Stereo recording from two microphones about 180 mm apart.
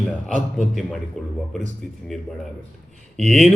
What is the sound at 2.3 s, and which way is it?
Speech, centre (ahead or behind).